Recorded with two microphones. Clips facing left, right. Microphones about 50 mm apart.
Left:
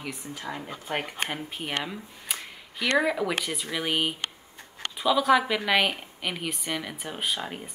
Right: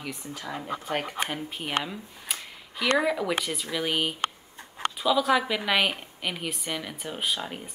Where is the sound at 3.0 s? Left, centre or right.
Centre.